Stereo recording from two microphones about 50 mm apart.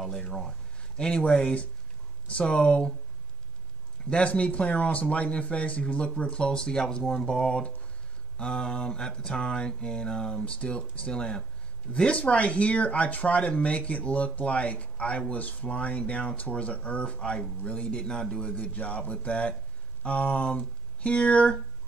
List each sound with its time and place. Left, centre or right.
0.2 s a sound: centre
1.0 s speech: left
4.1 s speech: left